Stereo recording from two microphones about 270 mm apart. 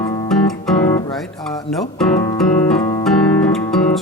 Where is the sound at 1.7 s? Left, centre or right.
Centre.